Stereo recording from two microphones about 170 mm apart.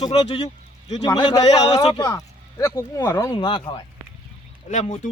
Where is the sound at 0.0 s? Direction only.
25° left (ahead or behind).